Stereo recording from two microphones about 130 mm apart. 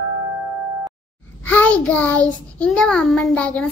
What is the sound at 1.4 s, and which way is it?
Child singing, 10° left (ahead or behind).